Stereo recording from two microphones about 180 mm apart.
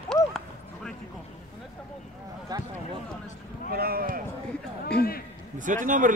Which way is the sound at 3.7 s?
55° right (ahead or behind).